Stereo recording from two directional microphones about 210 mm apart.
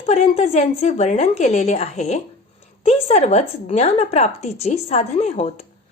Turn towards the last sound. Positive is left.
turn(degrees=30)  # may be behind; listen again after turning